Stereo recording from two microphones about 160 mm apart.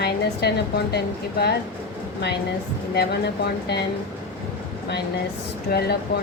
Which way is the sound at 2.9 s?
85° left.